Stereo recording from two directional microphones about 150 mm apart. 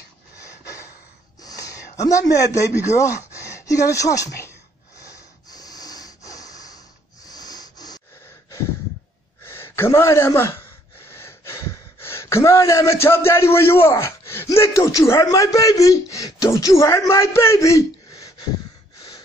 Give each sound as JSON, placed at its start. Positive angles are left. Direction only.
{"t": 1.4, "sound": "a sound", "side_deg": 25}
{"t": 2.9, "sound": "speech", "side_deg": 20}
{"t": 5.0, "sound": "snort", "side_deg": 25}
{"t": 9.4, "sound": "gasp", "side_deg": 15}
{"t": 15.3, "sound": "speech", "side_deg": 20}